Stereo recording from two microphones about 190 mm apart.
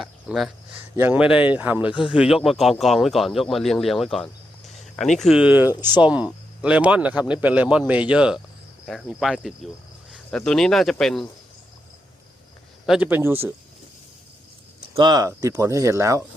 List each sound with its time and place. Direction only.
0.0 s cricket: centre (ahead or behind)
0.9 s speech: 10° right (ahead or behind)
12.8 s speech: 5° right (ahead or behind)
14.9 s speech: 20° right (ahead or behind)